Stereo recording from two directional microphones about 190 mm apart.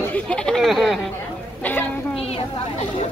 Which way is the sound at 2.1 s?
30° left (ahead or behind).